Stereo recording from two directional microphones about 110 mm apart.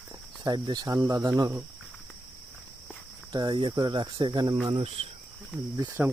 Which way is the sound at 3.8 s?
45° right (ahead or behind).